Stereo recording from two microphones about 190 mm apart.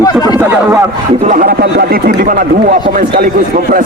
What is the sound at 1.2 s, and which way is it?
A man's voice, 45° right (ahead or behind).